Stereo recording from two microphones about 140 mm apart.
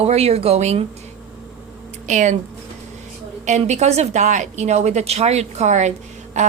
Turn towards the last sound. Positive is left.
turn(degrees=-55)  # may be behind; listen again after turning